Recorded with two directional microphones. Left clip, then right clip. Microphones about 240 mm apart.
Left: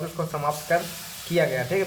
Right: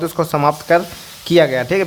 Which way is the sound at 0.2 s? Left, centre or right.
Right.